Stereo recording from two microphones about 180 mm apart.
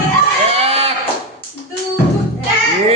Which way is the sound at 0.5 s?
35° right (ahead or behind).